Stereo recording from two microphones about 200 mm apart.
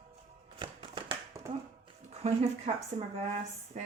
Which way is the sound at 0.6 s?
25° right (ahead or behind).